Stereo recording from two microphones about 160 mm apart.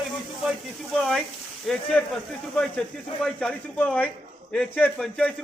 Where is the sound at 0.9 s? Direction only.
Centre (ahead or behind).